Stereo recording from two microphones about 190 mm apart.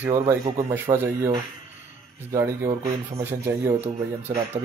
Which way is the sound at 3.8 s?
35° right (ahead or behind).